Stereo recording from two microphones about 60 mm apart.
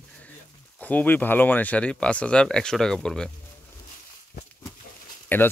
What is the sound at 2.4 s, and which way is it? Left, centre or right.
Speech, centre.